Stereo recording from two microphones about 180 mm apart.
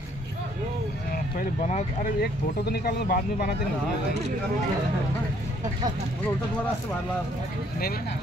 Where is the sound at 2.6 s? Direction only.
60° left (ahead or behind).